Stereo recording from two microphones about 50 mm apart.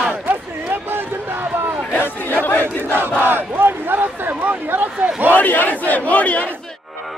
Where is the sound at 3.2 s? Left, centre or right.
Right.